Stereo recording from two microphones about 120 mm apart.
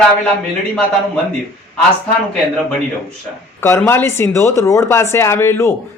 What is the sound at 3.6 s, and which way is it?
Speech, 20° left (ahead or behind).